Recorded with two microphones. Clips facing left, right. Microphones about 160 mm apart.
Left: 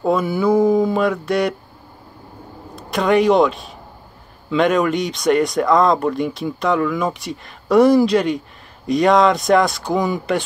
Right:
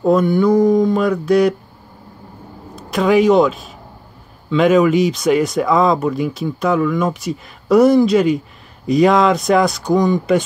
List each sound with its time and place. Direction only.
0.0 s speech: centre (ahead or behind)
2.7 s a man's voice: centre (ahead or behind)